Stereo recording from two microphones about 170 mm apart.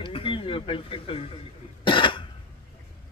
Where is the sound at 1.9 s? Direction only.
30° left (ahead or behind).